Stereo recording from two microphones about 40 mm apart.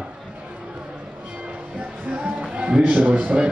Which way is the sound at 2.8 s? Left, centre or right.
Right.